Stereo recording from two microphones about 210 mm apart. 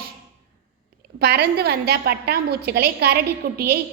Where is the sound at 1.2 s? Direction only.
45° right (ahead or behind).